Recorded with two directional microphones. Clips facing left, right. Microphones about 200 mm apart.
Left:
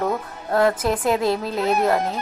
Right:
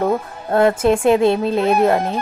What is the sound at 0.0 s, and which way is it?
Speech, 30° right (ahead or behind).